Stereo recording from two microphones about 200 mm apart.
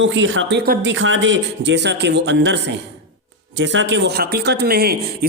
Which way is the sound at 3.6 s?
65° right (ahead or behind).